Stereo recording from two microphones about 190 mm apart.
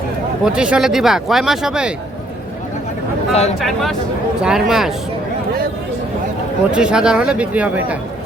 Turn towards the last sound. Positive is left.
turn(degrees=-5)  # may be behind; listen again after turning